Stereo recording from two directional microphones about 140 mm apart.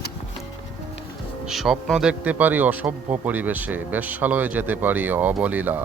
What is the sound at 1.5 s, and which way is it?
Speech, centre (ahead or behind).